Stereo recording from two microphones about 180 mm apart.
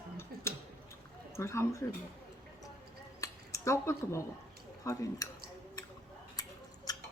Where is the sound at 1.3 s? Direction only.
15° left (ahead or behind).